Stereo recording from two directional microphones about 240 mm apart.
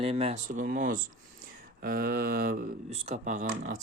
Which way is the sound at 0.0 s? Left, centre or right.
Right.